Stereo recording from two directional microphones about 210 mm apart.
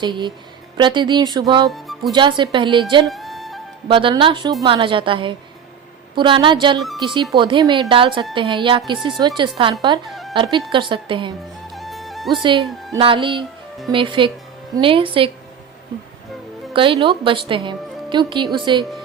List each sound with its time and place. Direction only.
0.0 s a woman's voice: 20° right (ahead or behind)
1.7 s speech: centre (ahead or behind)
2.1 s a woman's voice: 20° right (ahead or behind)
3.1 s music: centre (ahead or behind)
3.8 s a woman's voice: 25° right (ahead or behind)
6.7 s speech: centre (ahead or behind)
7.0 s a woman's voice: 20° right (ahead or behind)
10.1 s music: centre (ahead or behind)
10.3 s a woman's voice: 20° right (ahead or behind)
11.7 s music: centre (ahead or behind)
12.3 s a woman's voice: 25° right (ahead or behind)
16.7 s a woman's voice: 25° right (ahead or behind)